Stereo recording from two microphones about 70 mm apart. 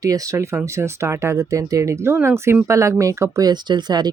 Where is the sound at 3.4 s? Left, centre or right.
Right.